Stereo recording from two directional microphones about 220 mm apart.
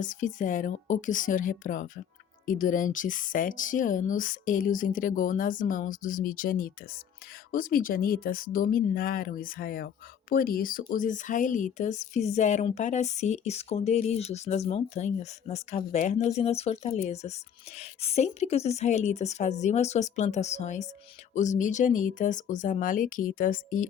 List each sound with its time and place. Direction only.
0.0 s speech: 35° left (ahead or behind)